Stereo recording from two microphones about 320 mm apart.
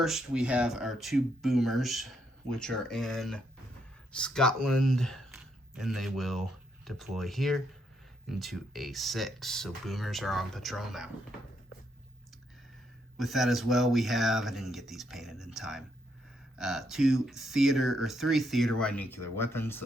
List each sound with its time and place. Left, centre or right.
0.0 s speech: centre
13.1 s speech: centre